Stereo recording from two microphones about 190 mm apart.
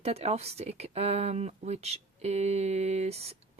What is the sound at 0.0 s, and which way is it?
Speech, 35° right (ahead or behind).